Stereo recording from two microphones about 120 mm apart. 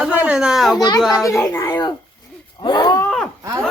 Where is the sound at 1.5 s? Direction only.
20° left (ahead or behind).